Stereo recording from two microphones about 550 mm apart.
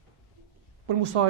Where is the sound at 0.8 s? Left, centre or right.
Right.